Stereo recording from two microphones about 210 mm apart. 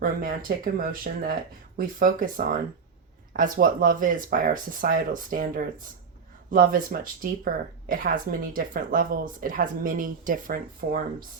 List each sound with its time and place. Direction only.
0.0 s speech: 40° right (ahead or behind)